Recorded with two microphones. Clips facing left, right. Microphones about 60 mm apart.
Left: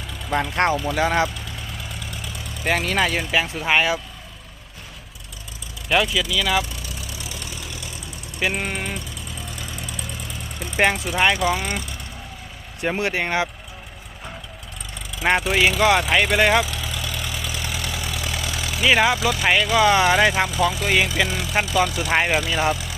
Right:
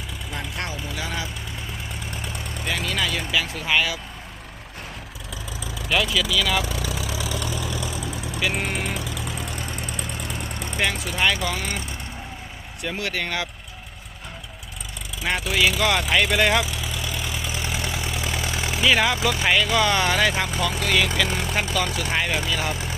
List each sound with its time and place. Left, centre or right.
0.3 s speech: left
2.6 s speech: left
5.9 s speech: centre
8.5 s speech: centre
9.0 s vehicle: right
9.6 s vehicle: right
10.8 s speech: left
12.8 s speech: left
15.4 s speech: left
16.6 s vehicle: centre; by 18.8 s right
18.8 s speech: left
21.2 s speech: right
21.5 s speech: left
22.7 s vehicle: right